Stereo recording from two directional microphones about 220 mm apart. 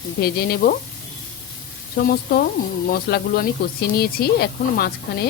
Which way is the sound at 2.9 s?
45° left (ahead or behind).